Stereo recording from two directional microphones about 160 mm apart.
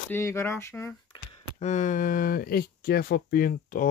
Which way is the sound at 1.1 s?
40° left (ahead or behind).